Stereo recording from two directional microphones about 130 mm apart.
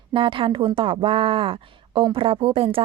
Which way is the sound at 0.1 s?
40° right (ahead or behind).